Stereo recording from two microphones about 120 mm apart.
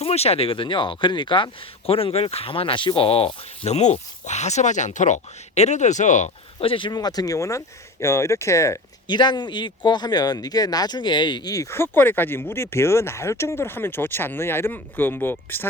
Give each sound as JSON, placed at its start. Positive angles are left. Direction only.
{"t": 0.0, "sound": "speech", "side_deg": 60}
{"t": 1.9, "sound": "speech", "side_deg": 50}
{"t": 6.6, "sound": "speech", "side_deg": 45}
{"t": 9.0, "sound": "speech", "side_deg": 40}